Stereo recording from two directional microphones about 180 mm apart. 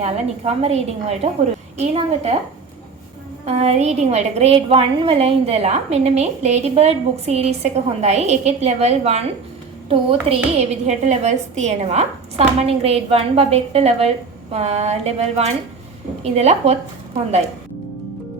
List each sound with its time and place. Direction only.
0.0 s a woman's voice: 35° right (ahead or behind)
3.4 s a woman's voice: 35° right (ahead or behind)